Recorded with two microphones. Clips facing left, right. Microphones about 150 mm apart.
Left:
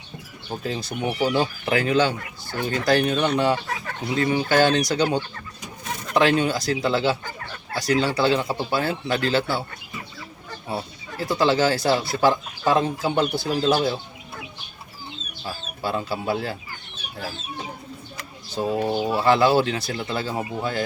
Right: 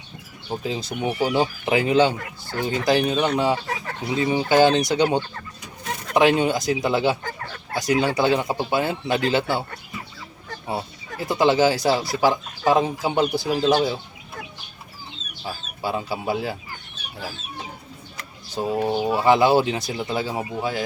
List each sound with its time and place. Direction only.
0.4 s speech: 15° right (ahead or behind)
11.2 s speech: 20° right (ahead or behind)
15.4 s speech: 15° right (ahead or behind)
18.5 s speech: 10° right (ahead or behind)